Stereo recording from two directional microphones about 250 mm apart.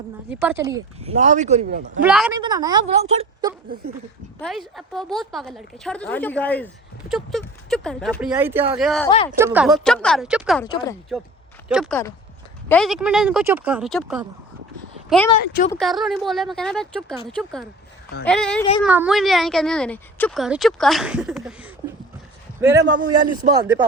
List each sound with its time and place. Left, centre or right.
0.3 s a woman's voice: centre
0.9 s speech: right
2.0 s speech: centre
2.3 s a woman's voice: centre
4.4 s speech: centre
9.0 s speech: centre
9.4 s speech: centre
10.6 s speech: centre
11.7 s speech: centre
15.7 s speech: centre
23.0 s a man's voice: right
23.5 s a woman's voice: centre